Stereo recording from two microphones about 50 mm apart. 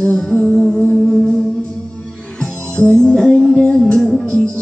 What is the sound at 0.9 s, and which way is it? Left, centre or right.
Music, centre.